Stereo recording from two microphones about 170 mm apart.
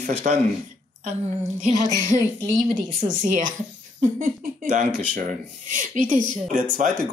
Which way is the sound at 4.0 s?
55° right (ahead or behind).